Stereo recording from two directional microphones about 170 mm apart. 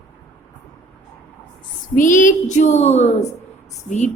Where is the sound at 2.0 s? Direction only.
50° left (ahead or behind).